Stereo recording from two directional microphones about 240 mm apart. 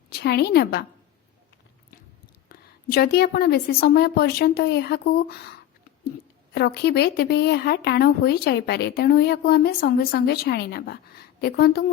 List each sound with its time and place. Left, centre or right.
0.1 s a woman's voice: left
2.5 s a woman's voice: left
6.5 s a woman's voice: left